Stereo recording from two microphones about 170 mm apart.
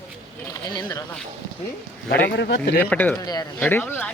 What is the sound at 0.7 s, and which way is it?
Speech, 25° left (ahead or behind).